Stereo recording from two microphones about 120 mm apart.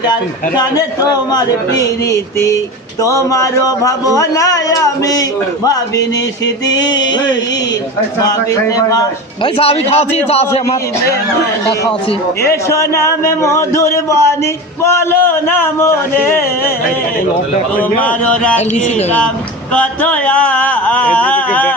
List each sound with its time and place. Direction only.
0.1 s a man's voice: 35° left (ahead or behind)
6.8 s a man's voice: 35° left (ahead or behind)
9.4 s a man's voice: 55° left (ahead or behind)
12.5 s speech: 25° left (ahead or behind)
17.7 s a sound: 10° left (ahead or behind)
19.7 s a sound: 10° left (ahead or behind)